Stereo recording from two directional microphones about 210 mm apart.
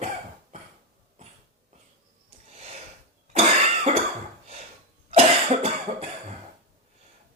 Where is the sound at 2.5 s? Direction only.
30° right (ahead or behind).